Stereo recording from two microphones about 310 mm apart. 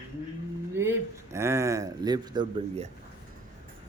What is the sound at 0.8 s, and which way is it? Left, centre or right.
Speech, centre.